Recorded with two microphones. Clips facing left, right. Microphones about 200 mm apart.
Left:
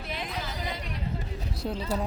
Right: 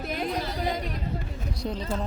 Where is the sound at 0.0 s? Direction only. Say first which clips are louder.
Right 6 dB; 45° right (ahead or behind).